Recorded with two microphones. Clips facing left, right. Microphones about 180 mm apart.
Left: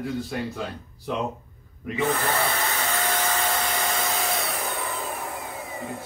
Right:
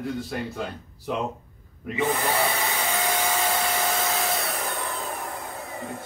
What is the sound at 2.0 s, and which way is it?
Tools, 15° right (ahead or behind).